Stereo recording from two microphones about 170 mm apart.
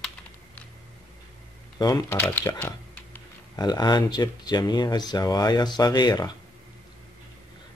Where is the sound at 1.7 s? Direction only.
25° left (ahead or behind).